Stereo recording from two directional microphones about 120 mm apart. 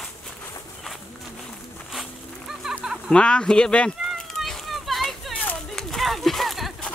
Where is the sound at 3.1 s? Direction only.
5° left (ahead or behind).